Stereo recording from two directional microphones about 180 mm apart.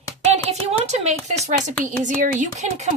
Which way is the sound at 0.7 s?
40° right (ahead or behind).